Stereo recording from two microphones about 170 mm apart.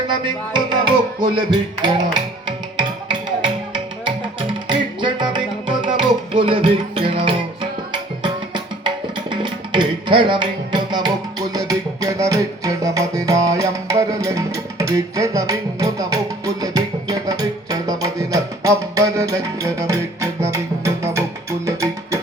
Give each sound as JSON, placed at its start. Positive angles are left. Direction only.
{"t": 0.3, "sound": "music", "side_deg": -25}